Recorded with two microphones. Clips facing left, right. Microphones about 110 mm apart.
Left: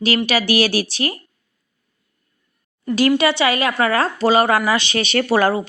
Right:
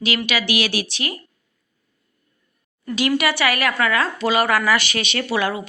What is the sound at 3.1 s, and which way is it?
Speech, 25° left (ahead or behind).